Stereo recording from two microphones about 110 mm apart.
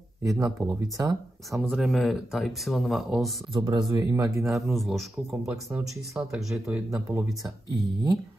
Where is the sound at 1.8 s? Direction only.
Centre (ahead or behind).